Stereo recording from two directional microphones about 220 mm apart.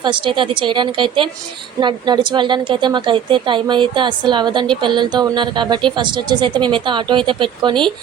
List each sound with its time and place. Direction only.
0.0 s a woman's voice: 20° right (ahead or behind)